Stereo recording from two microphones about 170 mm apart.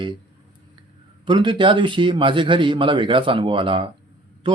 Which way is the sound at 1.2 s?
30° right (ahead or behind).